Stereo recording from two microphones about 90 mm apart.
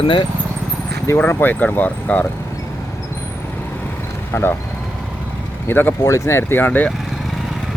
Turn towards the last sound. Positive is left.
turn(degrees=20)  # may be behind; listen again after turning